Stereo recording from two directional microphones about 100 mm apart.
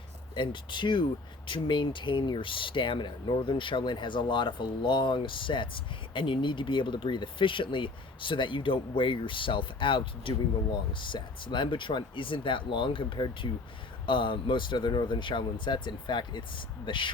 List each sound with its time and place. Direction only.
0.3 s speech: 55° left (ahead or behind)